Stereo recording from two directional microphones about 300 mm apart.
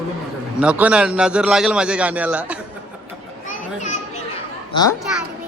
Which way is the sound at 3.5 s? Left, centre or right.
Left.